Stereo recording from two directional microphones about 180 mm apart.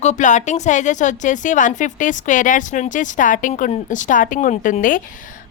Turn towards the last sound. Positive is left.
turn(degrees=45)  # may be behind; listen again after turning